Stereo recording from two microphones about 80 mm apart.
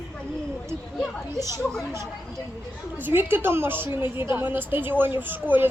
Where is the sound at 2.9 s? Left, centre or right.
Right.